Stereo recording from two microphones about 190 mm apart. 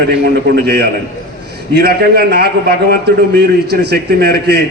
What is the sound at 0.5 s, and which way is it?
A man's voice, 55° right (ahead or behind).